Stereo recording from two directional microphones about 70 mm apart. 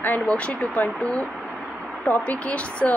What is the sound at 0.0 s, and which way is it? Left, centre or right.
Speech, left.